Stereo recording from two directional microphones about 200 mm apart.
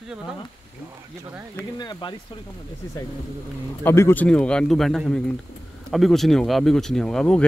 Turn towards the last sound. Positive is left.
turn(degrees=5)  # may be behind; listen again after turning